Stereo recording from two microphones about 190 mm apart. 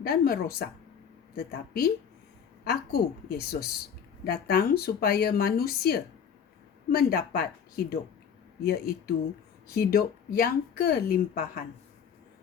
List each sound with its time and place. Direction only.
0.0 s speech: 55° left (ahead or behind)
7.1 s speech: 55° left (ahead or behind)